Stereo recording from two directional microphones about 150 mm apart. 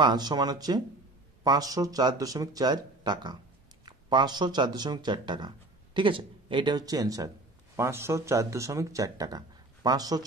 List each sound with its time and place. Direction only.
0.0 s speech: 30° right (ahead or behind)